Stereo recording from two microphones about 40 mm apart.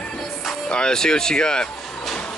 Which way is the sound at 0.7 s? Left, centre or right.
Left.